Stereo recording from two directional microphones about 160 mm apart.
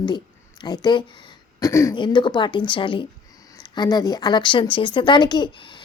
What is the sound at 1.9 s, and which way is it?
Speech, 30° left (ahead or behind).